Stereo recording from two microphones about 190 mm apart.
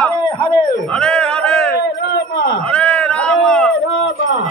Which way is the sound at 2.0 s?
65° left (ahead or behind).